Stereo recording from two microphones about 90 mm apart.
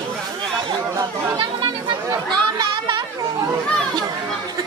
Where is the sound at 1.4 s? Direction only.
70° right (ahead or behind).